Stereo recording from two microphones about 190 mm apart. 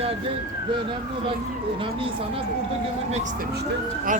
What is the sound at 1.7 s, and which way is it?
Speech, 30° right (ahead or behind).